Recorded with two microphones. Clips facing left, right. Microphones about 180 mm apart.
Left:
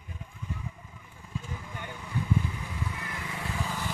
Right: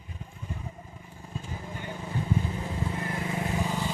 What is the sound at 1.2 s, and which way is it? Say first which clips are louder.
Vehicle: right 1 dB; 35° right (ahead or behind).